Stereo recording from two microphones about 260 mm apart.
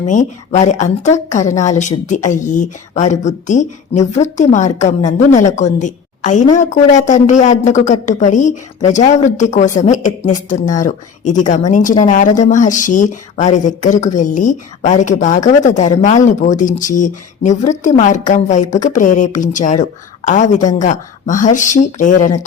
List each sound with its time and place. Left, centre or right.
0.1 s a woman's voice: left